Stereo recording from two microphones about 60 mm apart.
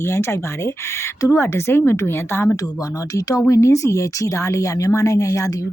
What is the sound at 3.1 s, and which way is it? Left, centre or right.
Speech, left.